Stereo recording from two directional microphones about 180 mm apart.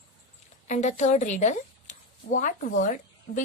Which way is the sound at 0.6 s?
40° left (ahead or behind).